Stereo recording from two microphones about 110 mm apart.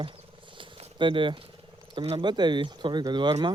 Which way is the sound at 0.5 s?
50° right (ahead or behind).